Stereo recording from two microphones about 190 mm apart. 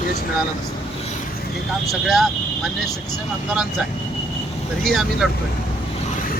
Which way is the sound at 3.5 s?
Centre (ahead or behind).